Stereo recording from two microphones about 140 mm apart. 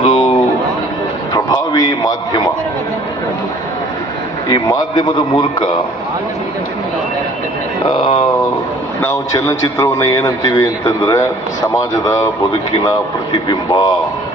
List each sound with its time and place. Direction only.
0.0 s a sound: 45° left (ahead or behind)
1.3 s a sound: 25° left (ahead or behind)
4.4 s speech: 35° left (ahead or behind)
7.9 s speech: 40° left (ahead or behind)
9.0 s a man's voice: 20° left (ahead or behind)
13.3 s speech: 35° left (ahead or behind)